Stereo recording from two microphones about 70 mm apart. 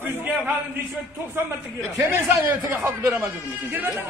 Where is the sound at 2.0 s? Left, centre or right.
Right.